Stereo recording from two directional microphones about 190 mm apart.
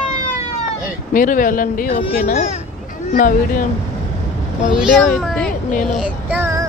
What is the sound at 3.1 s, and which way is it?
Speech, 45° left (ahead or behind).